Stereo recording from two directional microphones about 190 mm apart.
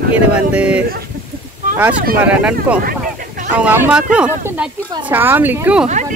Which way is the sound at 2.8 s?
50° right (ahead or behind).